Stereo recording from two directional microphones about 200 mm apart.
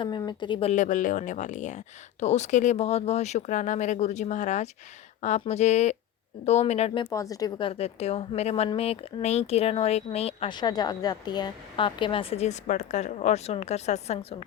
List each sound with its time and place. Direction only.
0.0 s a woman's voice: 20° left (ahead or behind)
7.1 s a woman's voice: 15° left (ahead or behind)